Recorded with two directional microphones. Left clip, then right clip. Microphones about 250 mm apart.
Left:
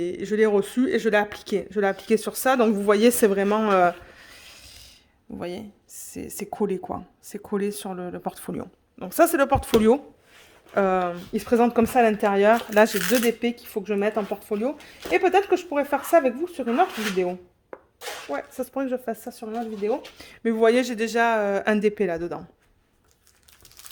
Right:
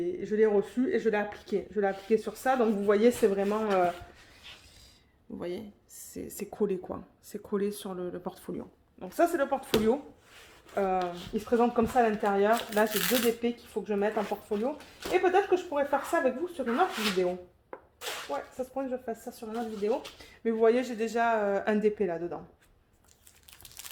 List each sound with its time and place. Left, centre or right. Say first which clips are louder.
0.0 s speech: left 4 dB; left
5.4 s speech: left 4 dB; left
10.8 s speech: left 7 dB; left
17.7 s a sound: left 4 dB; centre
18.3 s speech: left 8 dB; left